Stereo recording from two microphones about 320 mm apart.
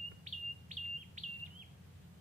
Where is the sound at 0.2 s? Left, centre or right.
Right.